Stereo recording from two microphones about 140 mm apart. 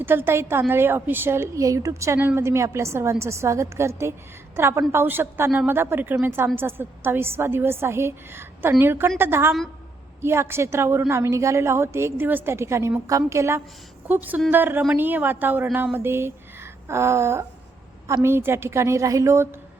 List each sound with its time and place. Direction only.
0.0 s a woman's voice: 15° right (ahead or behind)